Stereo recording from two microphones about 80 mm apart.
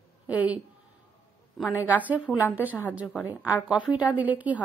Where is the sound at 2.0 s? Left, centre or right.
Centre.